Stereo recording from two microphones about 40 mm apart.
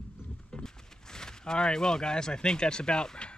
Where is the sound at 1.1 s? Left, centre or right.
Centre.